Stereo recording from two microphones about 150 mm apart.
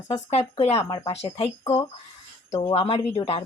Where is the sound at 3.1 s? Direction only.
40° left (ahead or behind).